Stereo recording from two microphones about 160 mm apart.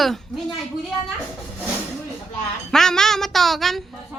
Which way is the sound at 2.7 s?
5° left (ahead or behind).